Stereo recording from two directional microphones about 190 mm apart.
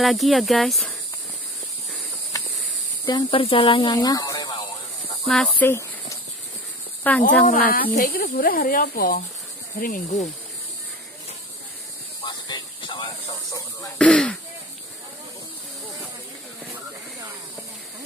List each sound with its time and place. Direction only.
0.0 s speech: centre (ahead or behind)
2.3 s a sound: 15° left (ahead or behind)
3.1 s speech: 25° left (ahead or behind)
5.2 s speech: centre (ahead or behind)
5.6 s a woman's voice: 15° left (ahead or behind)
7.4 s speech: 50° left (ahead or behind)
12.3 s a sound: 25° left (ahead or behind)
13.9 s throat clearing: 5° left (ahead or behind)